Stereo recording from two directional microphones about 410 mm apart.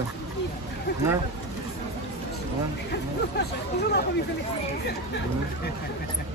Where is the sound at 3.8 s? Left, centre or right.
Left.